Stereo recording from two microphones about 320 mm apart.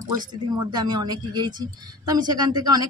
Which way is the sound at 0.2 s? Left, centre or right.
Centre.